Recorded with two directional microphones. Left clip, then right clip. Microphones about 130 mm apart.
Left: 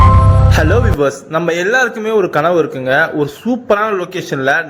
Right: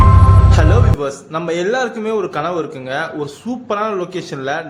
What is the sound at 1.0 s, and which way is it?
A man's voice, 35° left (ahead or behind).